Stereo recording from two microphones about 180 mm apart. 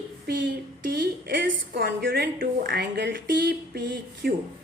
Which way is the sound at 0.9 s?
65° right (ahead or behind).